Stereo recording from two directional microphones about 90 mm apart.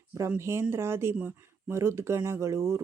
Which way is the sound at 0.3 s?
30° right (ahead or behind).